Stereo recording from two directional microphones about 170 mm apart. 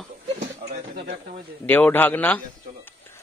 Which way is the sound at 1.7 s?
10° left (ahead or behind).